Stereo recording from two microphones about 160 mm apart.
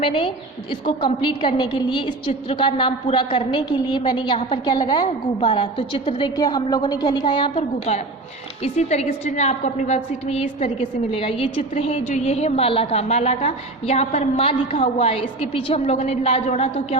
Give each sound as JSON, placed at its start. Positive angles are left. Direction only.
{"t": 0.0, "sound": "a woman's voice", "side_deg": 30}
{"t": 7.9, "sound": "a woman's voice", "side_deg": 45}